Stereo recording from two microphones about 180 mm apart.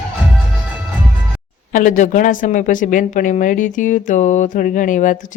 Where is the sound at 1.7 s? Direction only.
45° left (ahead or behind).